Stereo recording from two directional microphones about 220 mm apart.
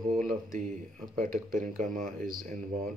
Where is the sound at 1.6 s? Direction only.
35° right (ahead or behind).